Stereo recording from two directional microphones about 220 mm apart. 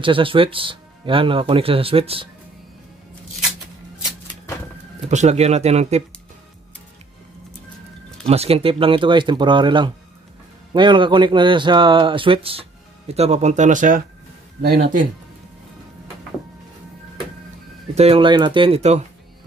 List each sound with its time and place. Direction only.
0.0 s speech: 25° right (ahead or behind)
5.1 s speech: 30° right (ahead or behind)
8.2 s speech: 30° right (ahead or behind)
17.9 s speech: 25° right (ahead or behind)